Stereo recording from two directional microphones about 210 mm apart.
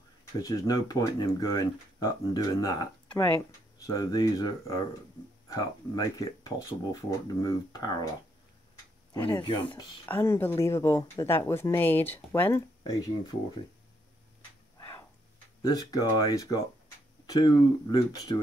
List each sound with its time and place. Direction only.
0.4 s speech: 15° left (ahead or behind)
9.1 s speech: 20° left (ahead or behind)
10.0 s speech: 10° left (ahead or behind)
15.6 s speech: 20° left (ahead or behind)